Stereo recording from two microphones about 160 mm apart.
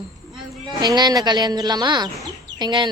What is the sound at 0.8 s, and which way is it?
Speech, 25° right (ahead or behind).